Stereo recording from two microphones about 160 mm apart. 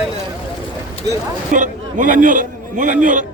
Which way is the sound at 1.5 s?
55° right (ahead or behind).